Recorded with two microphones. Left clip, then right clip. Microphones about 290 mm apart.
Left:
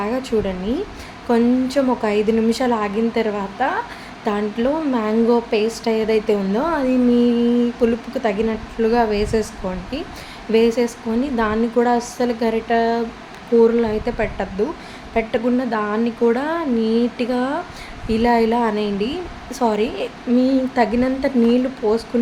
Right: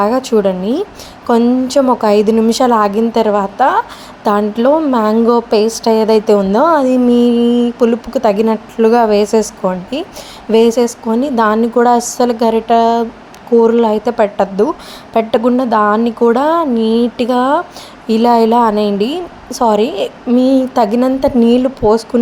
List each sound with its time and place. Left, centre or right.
0.0 s a woman's voice: right